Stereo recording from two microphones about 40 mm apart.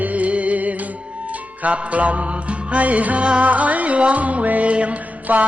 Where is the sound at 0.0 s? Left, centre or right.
Right.